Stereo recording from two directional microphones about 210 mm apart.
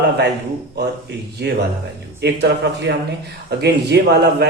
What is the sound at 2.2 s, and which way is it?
Speech, 55° right (ahead or behind).